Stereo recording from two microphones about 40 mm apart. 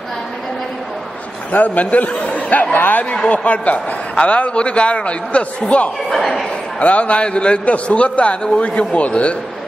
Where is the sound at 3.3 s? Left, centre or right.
Left.